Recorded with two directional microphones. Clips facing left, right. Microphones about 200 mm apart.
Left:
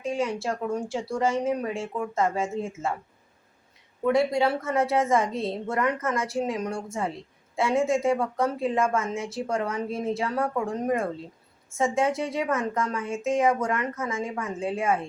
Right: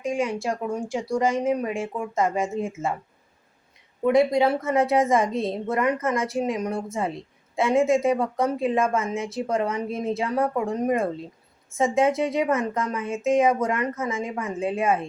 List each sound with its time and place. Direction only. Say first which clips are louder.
0.0 s a woman's voice: right 2 dB; 15° right (ahead or behind)
4.0 s a woman's voice: right 3 dB; 15° right (ahead or behind)